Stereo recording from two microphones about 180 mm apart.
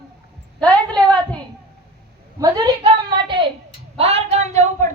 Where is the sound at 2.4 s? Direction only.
20° right (ahead or behind).